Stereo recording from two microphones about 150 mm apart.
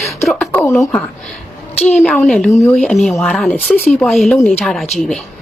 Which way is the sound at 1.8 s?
5° left (ahead or behind).